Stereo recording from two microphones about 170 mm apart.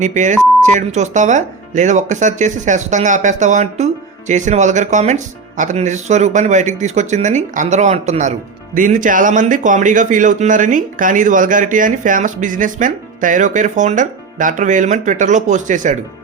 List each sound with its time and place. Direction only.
0.0 s speech: 45° right (ahead or behind)